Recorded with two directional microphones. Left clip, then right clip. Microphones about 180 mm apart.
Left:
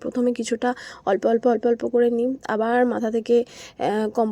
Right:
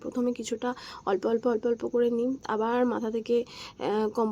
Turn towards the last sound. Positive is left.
turn(degrees=25)  # may be behind; listen again after turning